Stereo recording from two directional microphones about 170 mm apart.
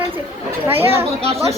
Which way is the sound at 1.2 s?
35° right (ahead or behind).